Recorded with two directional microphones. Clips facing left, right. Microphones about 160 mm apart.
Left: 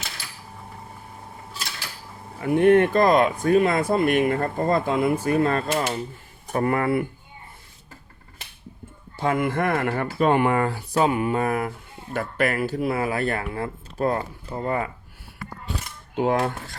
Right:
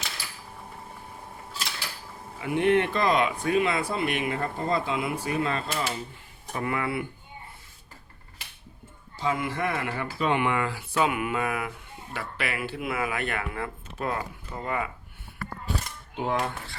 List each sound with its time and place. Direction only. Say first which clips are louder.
2.4 s speech: left 6 dB; 45° left (ahead or behind)
9.1 s speech: left 6 dB; 55° left (ahead or behind); by 14.8 s 35° left (ahead or behind)
16.1 s speech: left 6 dB; 50° left (ahead or behind)